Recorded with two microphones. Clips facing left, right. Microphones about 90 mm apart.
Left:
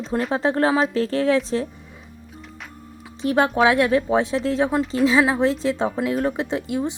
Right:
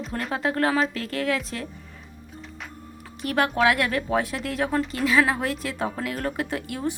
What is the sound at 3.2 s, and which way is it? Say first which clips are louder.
Speech: left 4 dB; 20° left (ahead or behind).